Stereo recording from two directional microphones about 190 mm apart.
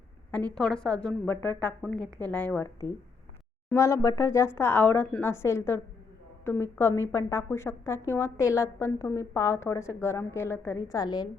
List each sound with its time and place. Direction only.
0.5 s a woman's voice: 5° left (ahead or behind); by 11.3 s 20° left (ahead or behind)